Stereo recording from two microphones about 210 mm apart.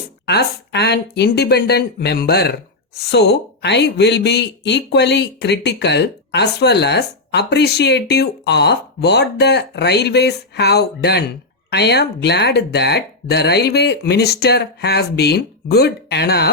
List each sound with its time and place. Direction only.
0.3 s speech: 50° left (ahead or behind)